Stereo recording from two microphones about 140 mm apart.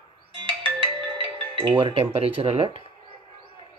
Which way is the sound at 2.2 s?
45° right (ahead or behind).